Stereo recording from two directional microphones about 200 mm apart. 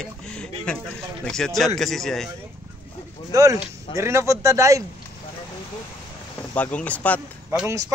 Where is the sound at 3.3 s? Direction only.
15° right (ahead or behind).